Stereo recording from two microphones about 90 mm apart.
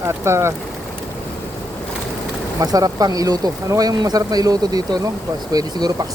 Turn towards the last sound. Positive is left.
turn(degrees=-45)  # may be behind; listen again after turning